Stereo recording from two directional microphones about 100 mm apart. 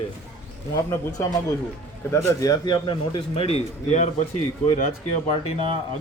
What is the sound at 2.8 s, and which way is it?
Speech, 55° left (ahead or behind).